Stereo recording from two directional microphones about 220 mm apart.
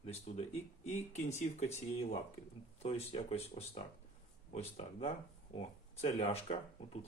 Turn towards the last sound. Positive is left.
turn(degrees=30)  # may be behind; listen again after turning